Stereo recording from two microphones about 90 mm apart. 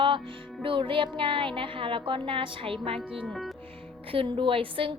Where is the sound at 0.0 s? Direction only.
70° right (ahead or behind); by 3.0 s 90° right.